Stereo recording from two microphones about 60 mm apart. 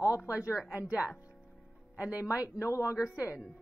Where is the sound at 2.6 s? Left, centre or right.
Left.